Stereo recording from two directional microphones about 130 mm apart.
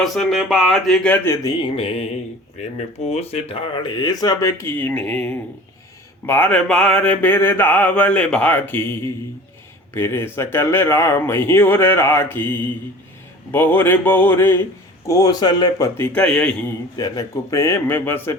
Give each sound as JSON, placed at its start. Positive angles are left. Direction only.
{"t": 0.0, "sound": "speech", "side_deg": 0}
{"t": 1.1, "sound": "mantra", "side_deg": 15}
{"t": 1.7, "sound": "mantra", "side_deg": 50}
{"t": 2.7, "sound": "speech", "side_deg": 55}
{"t": 6.2, "sound": "mantra", "side_deg": 15}
{"t": 9.9, "sound": "speech", "side_deg": 20}
{"t": 13.5, "sound": "mantra", "side_deg": 15}
{"t": 15.0, "sound": "speech", "side_deg": 25}
{"t": 16.0, "sound": "mantra", "side_deg": 10}
{"t": 17.0, "sound": "speech", "side_deg": 25}